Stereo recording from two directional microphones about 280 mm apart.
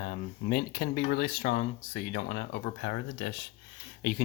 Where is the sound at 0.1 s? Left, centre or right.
Left.